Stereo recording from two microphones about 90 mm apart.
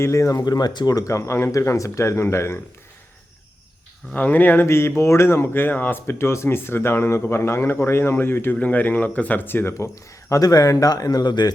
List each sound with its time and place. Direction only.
0.0 s speech: 35° left (ahead or behind)
4.1 s speech: 20° left (ahead or behind); by 11.5 s 50° left (ahead or behind)